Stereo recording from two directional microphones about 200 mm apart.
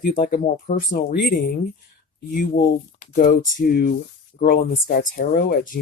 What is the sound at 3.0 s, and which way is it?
Speech, 40° left (ahead or behind).